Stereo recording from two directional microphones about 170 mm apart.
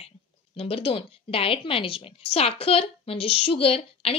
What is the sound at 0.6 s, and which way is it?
A woman's voice, 35° left (ahead or behind).